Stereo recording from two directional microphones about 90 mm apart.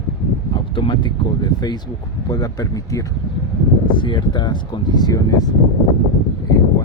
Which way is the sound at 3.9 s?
65° left (ahead or behind).